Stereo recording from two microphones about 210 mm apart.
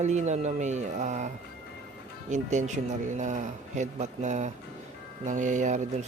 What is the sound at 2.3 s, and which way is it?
Speech, 35° right (ahead or behind).